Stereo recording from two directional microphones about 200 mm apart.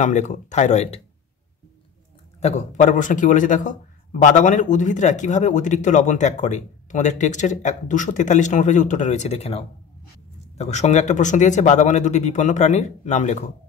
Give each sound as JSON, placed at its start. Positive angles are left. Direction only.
{"t": 0.0, "sound": "a man's voice", "side_deg": 35}
{"t": 2.4, "sound": "a man's voice", "side_deg": 35}